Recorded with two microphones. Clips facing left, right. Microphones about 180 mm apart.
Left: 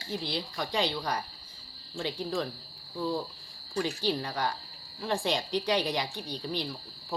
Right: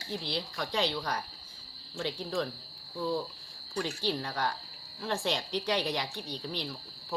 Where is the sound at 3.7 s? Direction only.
5° left (ahead or behind).